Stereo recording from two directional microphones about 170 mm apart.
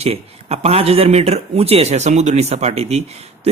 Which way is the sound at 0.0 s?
35° right (ahead or behind).